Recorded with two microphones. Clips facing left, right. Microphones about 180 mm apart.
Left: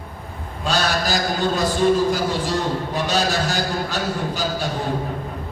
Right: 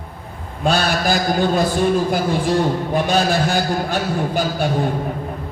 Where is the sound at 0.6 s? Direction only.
55° right (ahead or behind).